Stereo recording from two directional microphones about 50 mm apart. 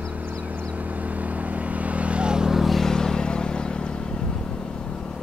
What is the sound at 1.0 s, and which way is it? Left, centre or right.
Vehicle, right.